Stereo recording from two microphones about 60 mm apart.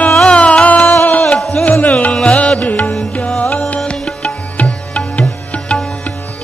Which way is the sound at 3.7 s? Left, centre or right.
Centre.